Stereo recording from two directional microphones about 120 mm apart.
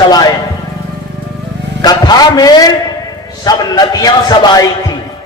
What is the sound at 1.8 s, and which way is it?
A man's voice, 35° left (ahead or behind).